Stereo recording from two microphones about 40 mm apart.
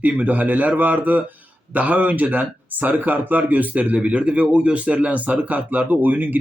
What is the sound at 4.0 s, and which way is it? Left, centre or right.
Speech, right.